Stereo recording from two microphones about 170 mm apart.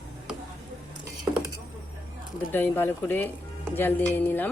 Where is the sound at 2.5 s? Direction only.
10° left (ahead or behind).